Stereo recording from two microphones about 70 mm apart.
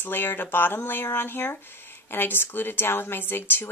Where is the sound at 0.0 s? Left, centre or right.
Left.